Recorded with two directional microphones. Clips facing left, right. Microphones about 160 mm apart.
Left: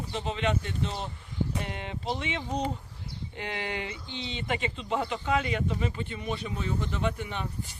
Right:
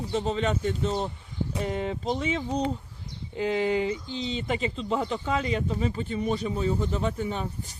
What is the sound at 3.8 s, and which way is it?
Speech, 35° right (ahead or behind).